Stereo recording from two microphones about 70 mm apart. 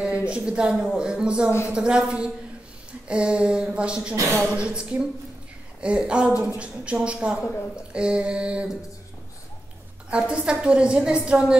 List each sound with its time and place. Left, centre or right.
0.0 s a woman's voice: centre
4.1 s a woman's voice: right
4.6 s a woman's voice: centre
10.0 s a woman's voice: centre